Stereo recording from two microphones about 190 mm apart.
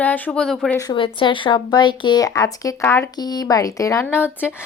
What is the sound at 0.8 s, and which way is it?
A woman's voice, 25° left (ahead or behind).